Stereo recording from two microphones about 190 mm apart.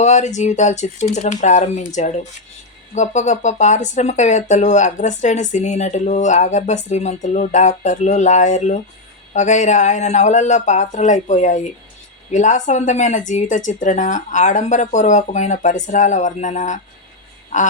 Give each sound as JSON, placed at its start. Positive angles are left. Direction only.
{"t": 0.0, "sound": "speech", "side_deg": 40}